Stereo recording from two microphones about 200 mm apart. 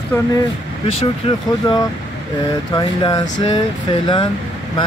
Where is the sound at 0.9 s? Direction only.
30° left (ahead or behind).